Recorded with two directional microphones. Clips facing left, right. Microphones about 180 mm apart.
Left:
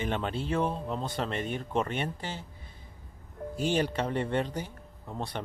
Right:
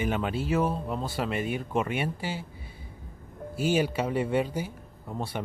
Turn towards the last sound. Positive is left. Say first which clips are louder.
# right 2 dB
turn(degrees=-5)  # may be behind; listen again after turning